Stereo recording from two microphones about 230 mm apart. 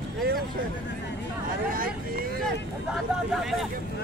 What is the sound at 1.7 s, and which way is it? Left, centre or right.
Speech, right.